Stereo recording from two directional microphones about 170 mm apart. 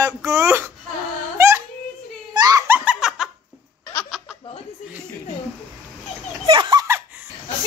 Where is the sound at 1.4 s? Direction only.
15° right (ahead or behind).